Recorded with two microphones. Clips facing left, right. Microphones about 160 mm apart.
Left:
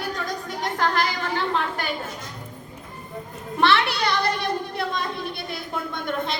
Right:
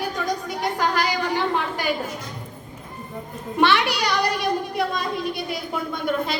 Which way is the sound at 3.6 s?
15° right (ahead or behind).